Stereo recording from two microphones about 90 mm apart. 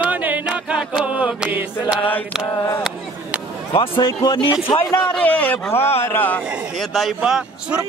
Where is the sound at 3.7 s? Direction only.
90° left.